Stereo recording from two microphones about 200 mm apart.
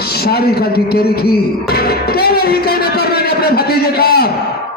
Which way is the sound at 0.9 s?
50° left (ahead or behind).